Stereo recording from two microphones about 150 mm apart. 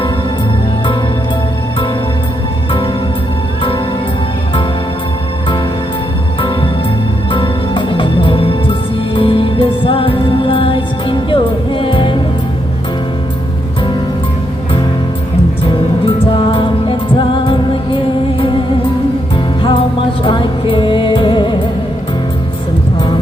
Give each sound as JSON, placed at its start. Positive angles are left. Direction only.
{"t": 7.3, "sound": "music", "side_deg": 35}
{"t": 16.0, "sound": "music", "side_deg": 35}
{"t": 20.2, "sound": "music", "side_deg": 35}